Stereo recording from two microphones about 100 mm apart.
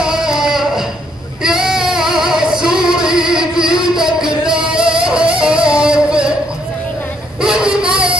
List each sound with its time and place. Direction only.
0.0 s a sound: 5° right (ahead or behind)
1.4 s female singing: 5° right (ahead or behind)
7.4 s child singing: 5° right (ahead or behind)
7.9 s music: 60° right (ahead or behind)